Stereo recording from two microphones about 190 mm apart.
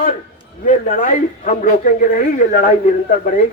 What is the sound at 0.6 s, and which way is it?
Speech, 40° left (ahead or behind).